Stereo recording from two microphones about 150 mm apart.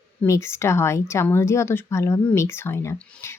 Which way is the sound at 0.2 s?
20° left (ahead or behind).